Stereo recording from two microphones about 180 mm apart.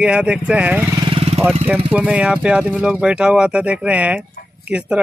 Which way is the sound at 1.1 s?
30° right (ahead or behind).